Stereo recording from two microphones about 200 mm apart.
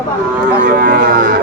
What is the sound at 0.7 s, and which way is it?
Speech, 45° right (ahead or behind).